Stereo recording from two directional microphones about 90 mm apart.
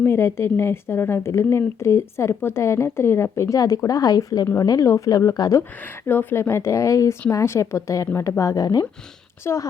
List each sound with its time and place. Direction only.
0.0 s a woman's voice: 30° left (ahead or behind)
6.1 s a woman's voice: 25° left (ahead or behind); by 8.9 s 45° left (ahead or behind)
9.4 s a woman's voice: 30° left (ahead or behind)